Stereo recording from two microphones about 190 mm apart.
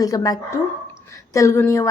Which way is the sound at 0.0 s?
20° left (ahead or behind).